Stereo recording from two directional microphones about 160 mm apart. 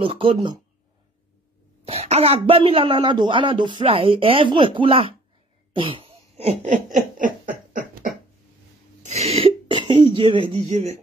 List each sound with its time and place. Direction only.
0.0 s speech: 35° right (ahead or behind)
1.9 s speech: 40° right (ahead or behind)
5.8 s cough: 35° right (ahead or behind)
6.6 s a sound: 50° right (ahead or behind)
9.0 s a sound: 40° right (ahead or behind)
9.7 s speech: 30° right (ahead or behind)